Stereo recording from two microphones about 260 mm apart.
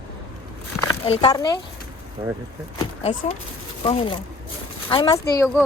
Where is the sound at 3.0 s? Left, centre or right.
Left.